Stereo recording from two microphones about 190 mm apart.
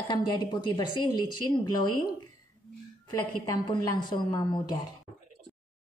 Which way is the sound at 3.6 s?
25° left (ahead or behind).